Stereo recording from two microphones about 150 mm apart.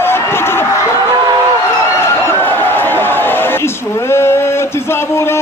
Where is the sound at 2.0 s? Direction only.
15° left (ahead or behind).